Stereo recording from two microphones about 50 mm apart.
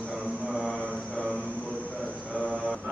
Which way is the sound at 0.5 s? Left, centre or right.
Right.